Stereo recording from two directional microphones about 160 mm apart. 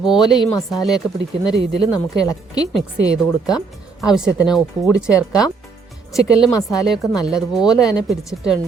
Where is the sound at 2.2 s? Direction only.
25° left (ahead or behind).